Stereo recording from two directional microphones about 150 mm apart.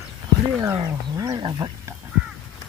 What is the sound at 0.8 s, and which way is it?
Livestock, 25° right (ahead or behind).